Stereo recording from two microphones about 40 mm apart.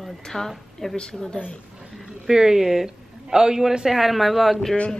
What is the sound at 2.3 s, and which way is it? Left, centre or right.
A woman's voice, centre.